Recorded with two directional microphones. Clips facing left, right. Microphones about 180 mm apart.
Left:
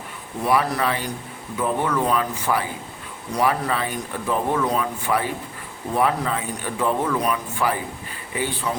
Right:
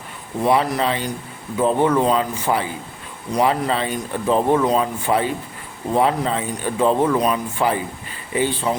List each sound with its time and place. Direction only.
0.4 s speech: 25° right (ahead or behind)